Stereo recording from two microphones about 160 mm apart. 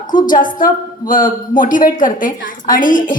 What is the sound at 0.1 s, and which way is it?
A woman's voice, 60° left (ahead or behind).